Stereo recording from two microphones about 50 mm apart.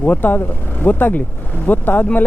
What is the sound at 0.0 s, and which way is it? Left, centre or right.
Speech, left.